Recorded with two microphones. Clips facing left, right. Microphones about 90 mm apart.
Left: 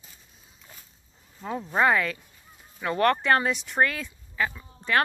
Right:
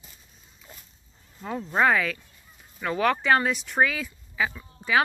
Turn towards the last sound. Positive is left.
turn(degrees=-5)  # may be behind; listen again after turning